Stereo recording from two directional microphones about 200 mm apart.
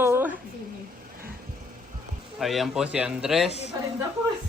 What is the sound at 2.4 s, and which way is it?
Speech, centre (ahead or behind).